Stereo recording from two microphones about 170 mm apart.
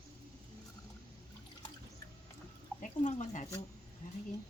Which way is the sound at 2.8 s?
45° left (ahead or behind).